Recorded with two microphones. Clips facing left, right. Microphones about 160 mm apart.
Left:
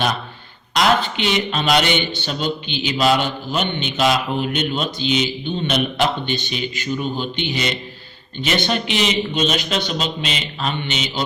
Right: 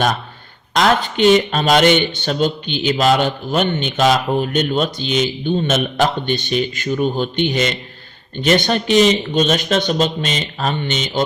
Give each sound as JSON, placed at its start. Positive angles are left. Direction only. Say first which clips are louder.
{"t": 0.7, "sound": "speech", "louder": "right 2 dB", "side_deg": -45}